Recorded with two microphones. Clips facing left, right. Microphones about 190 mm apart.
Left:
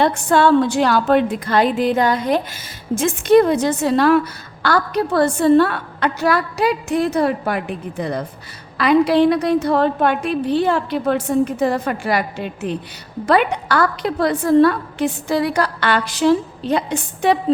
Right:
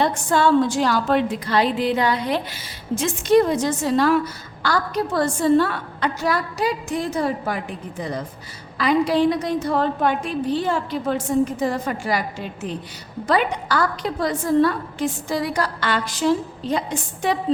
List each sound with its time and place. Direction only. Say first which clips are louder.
0.0 s a woman's voice: left 4 dB; 65° left (ahead or behind)